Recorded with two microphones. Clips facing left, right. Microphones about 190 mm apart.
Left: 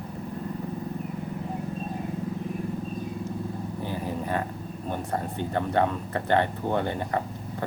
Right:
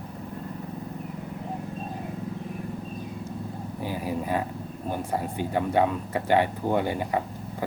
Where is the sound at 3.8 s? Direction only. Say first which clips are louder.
Right 3 dB; 10° right (ahead or behind).